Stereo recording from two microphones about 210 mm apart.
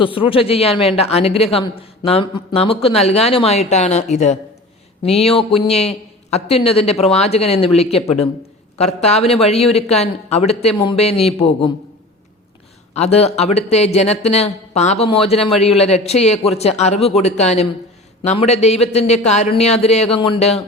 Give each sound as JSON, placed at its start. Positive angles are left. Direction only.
{"t": 0.0, "sound": "a woman's voice", "side_deg": 25}
{"t": 12.9, "sound": "a man's voice", "side_deg": 30}